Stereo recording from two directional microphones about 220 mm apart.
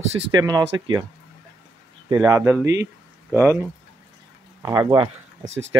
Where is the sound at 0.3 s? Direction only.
20° right (ahead or behind).